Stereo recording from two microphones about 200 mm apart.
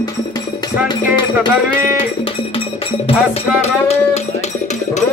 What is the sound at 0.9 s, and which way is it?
Speech, 20° left (ahead or behind).